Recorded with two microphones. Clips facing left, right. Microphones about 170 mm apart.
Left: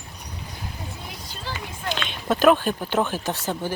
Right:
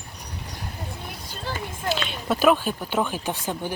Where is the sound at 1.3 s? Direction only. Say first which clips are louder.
Right 3 dB; 50° right (ahead or behind).